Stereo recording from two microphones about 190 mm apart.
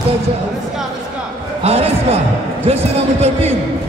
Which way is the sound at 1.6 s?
30° right (ahead or behind).